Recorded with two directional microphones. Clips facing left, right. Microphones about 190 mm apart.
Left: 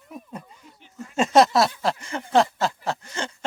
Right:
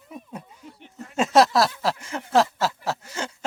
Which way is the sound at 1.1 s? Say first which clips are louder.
Left 1 dB; centre (ahead or behind).